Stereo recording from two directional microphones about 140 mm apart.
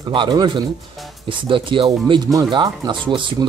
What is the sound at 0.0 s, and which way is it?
Speech, 30° right (ahead or behind).